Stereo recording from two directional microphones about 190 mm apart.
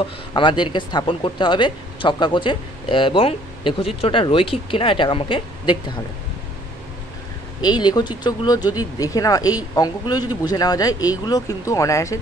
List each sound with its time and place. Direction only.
0.3 s speech: 25° left (ahead or behind)
7.6 s speech: 20° left (ahead or behind)